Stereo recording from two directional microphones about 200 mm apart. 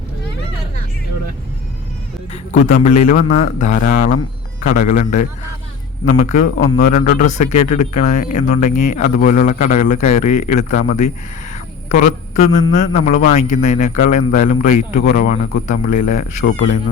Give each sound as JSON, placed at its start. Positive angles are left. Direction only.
{"t": 2.3, "sound": "speech", "side_deg": 40}